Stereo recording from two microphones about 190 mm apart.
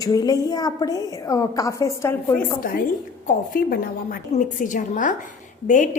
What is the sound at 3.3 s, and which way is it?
A woman's voice, 50° left (ahead or behind).